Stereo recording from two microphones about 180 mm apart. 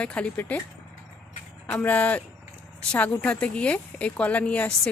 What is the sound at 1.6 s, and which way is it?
A child's voice, 10° left (ahead or behind).